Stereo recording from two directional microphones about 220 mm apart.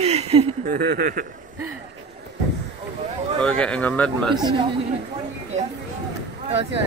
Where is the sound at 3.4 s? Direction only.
5° left (ahead or behind).